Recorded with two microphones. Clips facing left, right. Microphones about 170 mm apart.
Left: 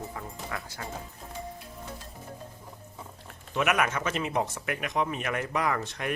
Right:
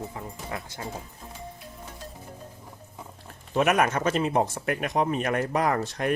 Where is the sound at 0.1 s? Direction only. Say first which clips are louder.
Right 2 dB; 20° right (ahead or behind).